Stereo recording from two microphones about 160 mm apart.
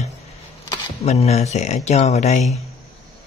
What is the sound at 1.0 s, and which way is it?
Speech, 40° left (ahead or behind).